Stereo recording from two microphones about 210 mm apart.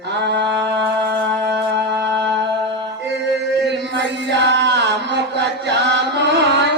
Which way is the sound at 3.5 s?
55° right (ahead or behind).